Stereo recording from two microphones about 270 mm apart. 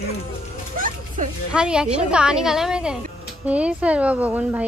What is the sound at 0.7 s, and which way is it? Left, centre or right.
Speech, right.